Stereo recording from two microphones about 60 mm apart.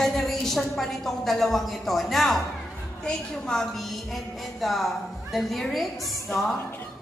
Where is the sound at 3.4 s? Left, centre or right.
Centre.